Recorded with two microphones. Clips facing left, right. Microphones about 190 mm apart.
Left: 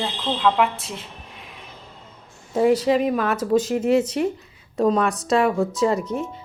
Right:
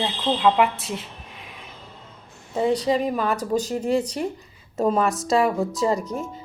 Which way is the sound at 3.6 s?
35° right (ahead or behind).